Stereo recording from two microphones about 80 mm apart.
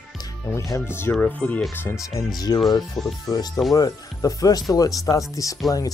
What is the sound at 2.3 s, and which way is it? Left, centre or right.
Speech, left.